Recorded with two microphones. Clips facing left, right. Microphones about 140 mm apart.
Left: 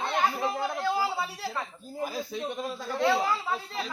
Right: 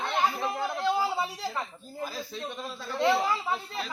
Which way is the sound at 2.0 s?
15° left (ahead or behind).